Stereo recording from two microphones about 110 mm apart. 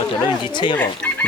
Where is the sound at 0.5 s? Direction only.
45° left (ahead or behind).